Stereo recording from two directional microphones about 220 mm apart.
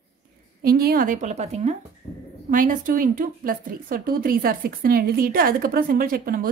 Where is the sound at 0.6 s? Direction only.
45° right (ahead or behind).